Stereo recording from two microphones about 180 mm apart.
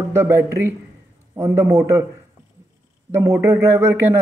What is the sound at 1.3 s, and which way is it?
Speech, 15° right (ahead or behind).